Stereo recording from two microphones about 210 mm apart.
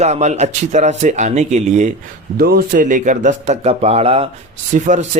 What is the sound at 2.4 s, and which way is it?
Speech, 45° right (ahead or behind).